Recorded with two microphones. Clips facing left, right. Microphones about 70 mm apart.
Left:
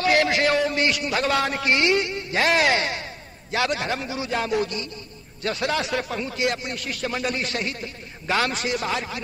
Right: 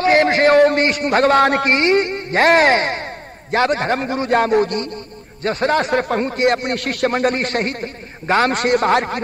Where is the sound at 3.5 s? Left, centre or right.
Right.